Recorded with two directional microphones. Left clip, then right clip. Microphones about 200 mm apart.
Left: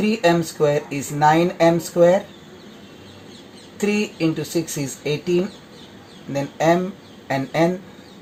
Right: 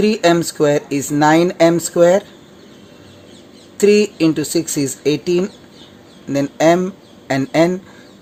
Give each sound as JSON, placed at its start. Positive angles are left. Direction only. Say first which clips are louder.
{"t": 0.0, "sound": "speech", "louder": "right 4 dB", "side_deg": -45}
{"t": 3.8, "sound": "speech", "louder": "right 10 dB", "side_deg": -50}